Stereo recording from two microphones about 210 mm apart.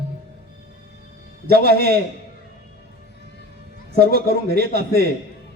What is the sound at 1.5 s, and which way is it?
Speech, 50° right (ahead or behind).